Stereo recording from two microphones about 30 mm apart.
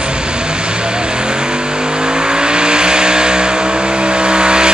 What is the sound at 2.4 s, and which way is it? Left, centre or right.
Vehicle, right.